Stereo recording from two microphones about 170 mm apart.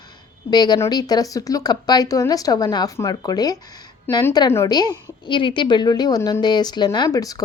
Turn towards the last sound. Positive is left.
turn(degrees=20)  # may be behind; listen again after turning